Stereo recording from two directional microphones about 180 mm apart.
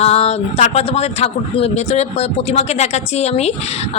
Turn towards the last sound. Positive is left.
turn(degrees=35)  # may be behind; listen again after turning